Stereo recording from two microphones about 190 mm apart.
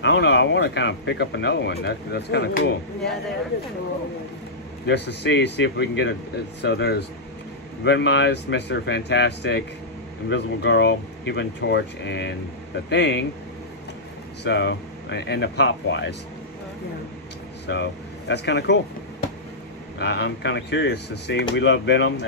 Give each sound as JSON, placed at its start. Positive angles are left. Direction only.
{"t": 0.0, "sound": "speech", "side_deg": 65}
{"t": 4.8, "sound": "speech", "side_deg": 65}
{"t": 14.4, "sound": "speech", "side_deg": 65}
{"t": 17.6, "sound": "speech", "side_deg": 65}
{"t": 20.0, "sound": "speech", "side_deg": 65}